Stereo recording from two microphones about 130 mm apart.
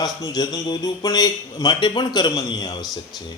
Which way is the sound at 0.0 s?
30° left (ahead or behind).